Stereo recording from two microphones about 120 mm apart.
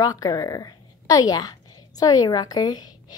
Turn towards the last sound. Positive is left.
turn(degrees=35)  # may be behind; listen again after turning